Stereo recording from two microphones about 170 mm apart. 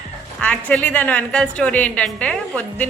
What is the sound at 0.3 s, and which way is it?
A woman's voice, 5° left (ahead or behind).